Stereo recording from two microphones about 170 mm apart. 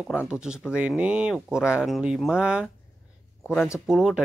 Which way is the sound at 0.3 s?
5° right (ahead or behind).